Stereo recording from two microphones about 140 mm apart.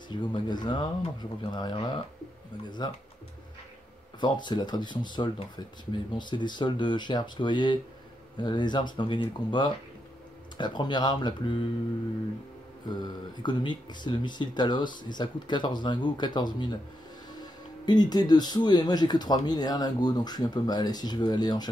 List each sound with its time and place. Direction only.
0.1 s speech: 35° left (ahead or behind)
4.2 s speech: 30° left (ahead or behind)
12.8 s speech: 30° left (ahead or behind)